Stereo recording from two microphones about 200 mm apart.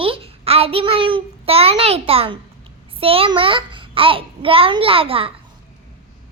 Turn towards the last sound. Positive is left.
turn(degrees=-25)  # may be behind; listen again after turning